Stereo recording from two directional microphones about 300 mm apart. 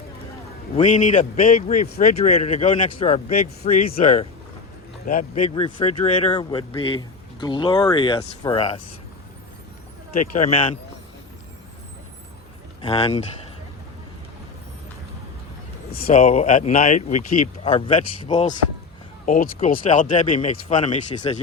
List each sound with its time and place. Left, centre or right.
0.8 s speech: left
10.2 s speech: left
12.8 s speech: centre
15.9 s speech: left